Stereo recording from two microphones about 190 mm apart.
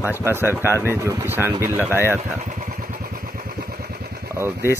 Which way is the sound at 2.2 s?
45° right (ahead or behind).